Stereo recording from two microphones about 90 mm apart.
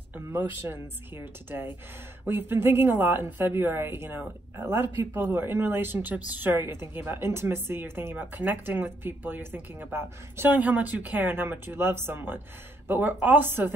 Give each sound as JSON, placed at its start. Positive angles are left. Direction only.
{"t": 0.1, "sound": "a woman's voice", "side_deg": -25}